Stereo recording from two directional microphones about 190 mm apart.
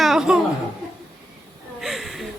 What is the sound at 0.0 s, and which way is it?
Laughter, centre (ahead or behind).